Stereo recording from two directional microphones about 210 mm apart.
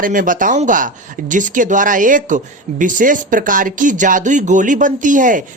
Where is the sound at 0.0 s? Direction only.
40° right (ahead or behind).